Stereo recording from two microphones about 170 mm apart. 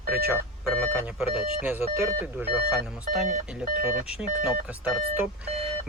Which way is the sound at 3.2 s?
50° right (ahead or behind).